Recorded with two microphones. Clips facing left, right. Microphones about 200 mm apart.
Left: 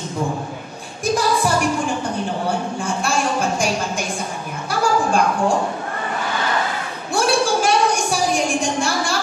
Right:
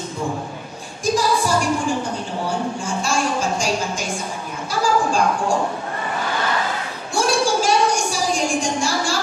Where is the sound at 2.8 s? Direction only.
60° left (ahead or behind).